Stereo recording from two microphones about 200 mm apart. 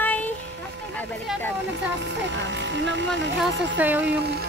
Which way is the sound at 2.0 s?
65° right (ahead or behind).